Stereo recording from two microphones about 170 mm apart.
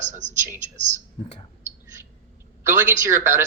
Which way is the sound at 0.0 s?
45° right (ahead or behind).